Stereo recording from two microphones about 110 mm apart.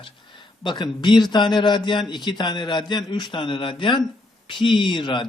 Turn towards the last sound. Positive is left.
turn(degrees=50)  # may be behind; listen again after turning